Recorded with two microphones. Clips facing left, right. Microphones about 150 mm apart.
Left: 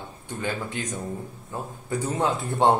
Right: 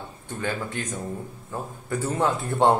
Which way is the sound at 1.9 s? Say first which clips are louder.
Right 1 dB; 20° left (ahead or behind).